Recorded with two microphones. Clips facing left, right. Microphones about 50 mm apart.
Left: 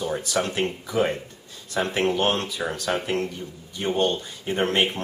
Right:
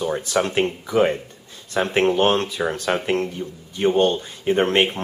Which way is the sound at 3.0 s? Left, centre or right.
Right.